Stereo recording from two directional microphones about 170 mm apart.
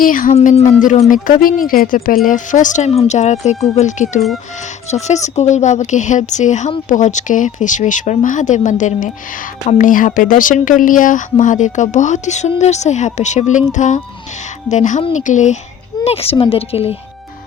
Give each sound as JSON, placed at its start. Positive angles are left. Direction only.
{"t": 0.0, "sound": "a woman's voice", "side_deg": 55}
{"t": 0.3, "sound": "a woman's voice", "side_deg": 40}
{"t": 16.0, "sound": "a woman's voice", "side_deg": 35}